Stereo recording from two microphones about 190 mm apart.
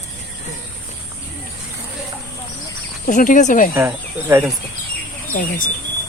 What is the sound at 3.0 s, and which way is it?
Speech, 45° left (ahead or behind).